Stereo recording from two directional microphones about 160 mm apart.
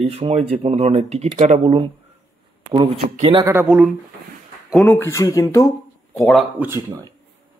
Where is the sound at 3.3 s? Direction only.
15° right (ahead or behind).